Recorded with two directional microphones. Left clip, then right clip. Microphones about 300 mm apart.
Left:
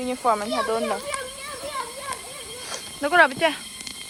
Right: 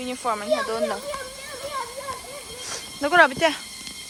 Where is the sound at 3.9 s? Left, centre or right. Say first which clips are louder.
Left 3 dB; right.